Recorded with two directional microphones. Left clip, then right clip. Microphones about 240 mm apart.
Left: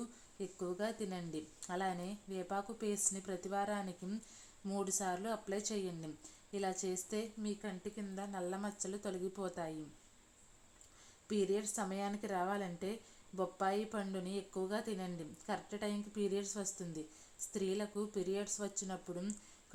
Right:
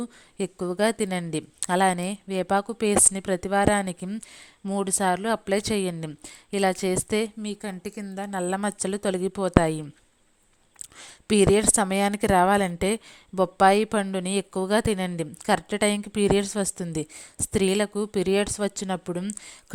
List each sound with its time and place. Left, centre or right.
0.3 s a woman's voice: right
11.3 s a woman's voice: right